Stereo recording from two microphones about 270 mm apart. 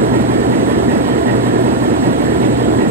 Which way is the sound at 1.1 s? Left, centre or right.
Right.